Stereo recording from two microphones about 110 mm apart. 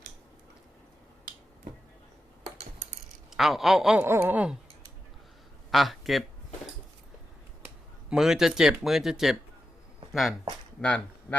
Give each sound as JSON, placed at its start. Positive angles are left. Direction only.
{"t": 3.2, "sound": "speech", "side_deg": 0}
{"t": 4.0, "sound": "speech", "side_deg": -20}
{"t": 5.7, "sound": "speech", "side_deg": 0}
{"t": 8.1, "sound": "speech", "side_deg": -5}